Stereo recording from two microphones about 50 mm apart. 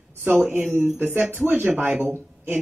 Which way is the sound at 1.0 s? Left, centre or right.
Right.